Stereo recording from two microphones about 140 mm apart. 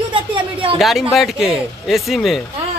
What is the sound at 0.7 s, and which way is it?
Speech, centre (ahead or behind).